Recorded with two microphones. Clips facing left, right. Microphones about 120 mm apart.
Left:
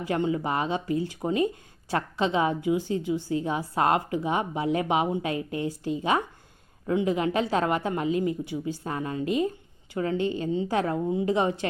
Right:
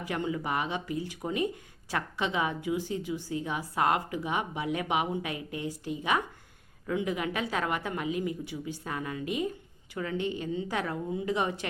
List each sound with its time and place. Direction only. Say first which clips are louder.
0.0 s a woman's voice: left 6 dB; 30° left (ahead or behind)